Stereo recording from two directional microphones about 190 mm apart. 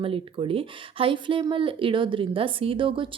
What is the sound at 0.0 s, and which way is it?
Speech, 30° right (ahead or behind).